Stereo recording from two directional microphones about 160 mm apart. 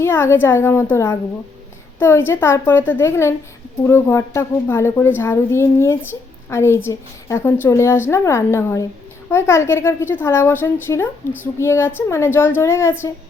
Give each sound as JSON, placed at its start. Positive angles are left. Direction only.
{"t": 0.0, "sound": "a woman's voice", "side_deg": 15}